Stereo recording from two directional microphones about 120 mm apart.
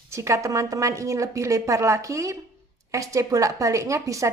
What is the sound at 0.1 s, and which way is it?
A woman's voice, 25° right (ahead or behind).